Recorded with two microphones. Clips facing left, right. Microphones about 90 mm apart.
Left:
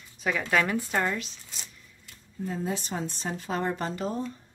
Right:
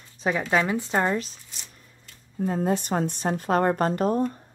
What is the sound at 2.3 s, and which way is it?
A woman's voice, 55° right (ahead or behind).